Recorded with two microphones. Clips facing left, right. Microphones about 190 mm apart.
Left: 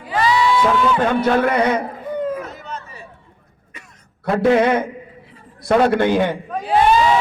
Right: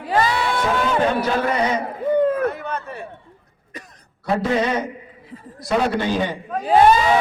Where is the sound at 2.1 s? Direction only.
60° right (ahead or behind).